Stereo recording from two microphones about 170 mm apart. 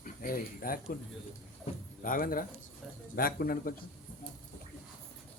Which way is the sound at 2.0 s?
55° left (ahead or behind).